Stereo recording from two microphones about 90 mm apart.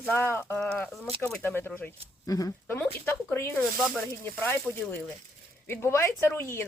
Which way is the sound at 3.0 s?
25° left (ahead or behind).